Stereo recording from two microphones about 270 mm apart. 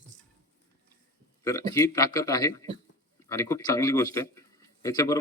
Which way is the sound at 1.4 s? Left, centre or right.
Centre.